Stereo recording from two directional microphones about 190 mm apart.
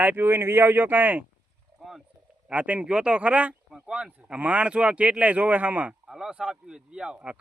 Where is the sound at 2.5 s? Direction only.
5° right (ahead or behind).